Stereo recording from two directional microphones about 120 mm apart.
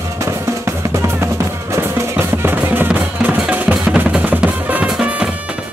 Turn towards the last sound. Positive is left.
turn(degrees=-10)  # may be behind; listen again after turning